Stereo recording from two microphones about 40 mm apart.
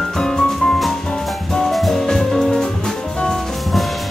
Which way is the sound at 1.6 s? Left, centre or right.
Centre.